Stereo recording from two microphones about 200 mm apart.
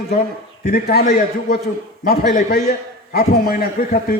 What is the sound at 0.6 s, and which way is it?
A man's voice, 50° left (ahead or behind).